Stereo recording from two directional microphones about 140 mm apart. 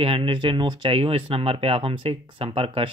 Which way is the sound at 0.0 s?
40° right (ahead or behind).